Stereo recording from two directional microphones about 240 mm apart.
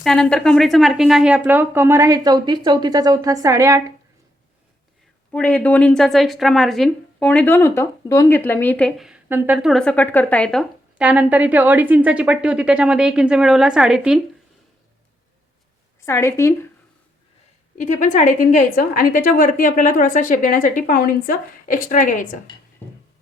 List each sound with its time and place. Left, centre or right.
0.0 s speech: centre
5.3 s speech: centre
16.0 s a woman's voice: centre
17.7 s a woman's voice: left